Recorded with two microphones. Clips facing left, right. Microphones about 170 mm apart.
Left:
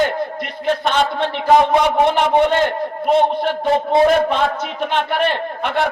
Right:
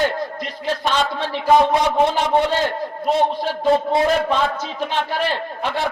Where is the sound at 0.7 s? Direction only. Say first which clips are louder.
Left 3 dB; 55° left (ahead or behind).